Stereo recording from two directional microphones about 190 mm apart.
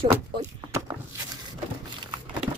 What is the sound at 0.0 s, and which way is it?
Speech, 30° right (ahead or behind).